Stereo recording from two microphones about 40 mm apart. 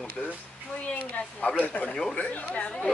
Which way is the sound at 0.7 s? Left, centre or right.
Left.